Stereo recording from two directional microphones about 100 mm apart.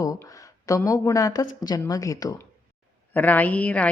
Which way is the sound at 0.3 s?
35° left (ahead or behind).